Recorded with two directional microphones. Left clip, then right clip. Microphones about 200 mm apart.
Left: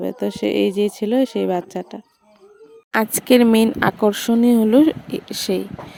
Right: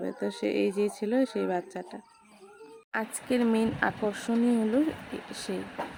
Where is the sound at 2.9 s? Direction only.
45° left (ahead or behind).